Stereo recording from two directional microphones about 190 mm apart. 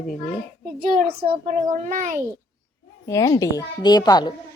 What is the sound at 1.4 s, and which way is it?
Speech, 40° right (ahead or behind).